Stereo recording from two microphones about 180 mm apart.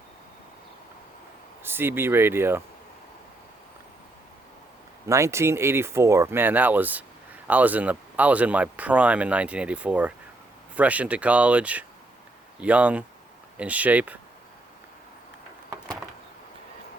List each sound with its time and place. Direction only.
1.6 s speech: 10° right (ahead or behind)
5.0 s speech: 15° right (ahead or behind)